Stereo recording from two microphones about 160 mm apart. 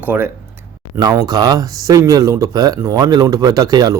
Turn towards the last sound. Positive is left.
turn(degrees=-25)  # may be behind; listen again after turning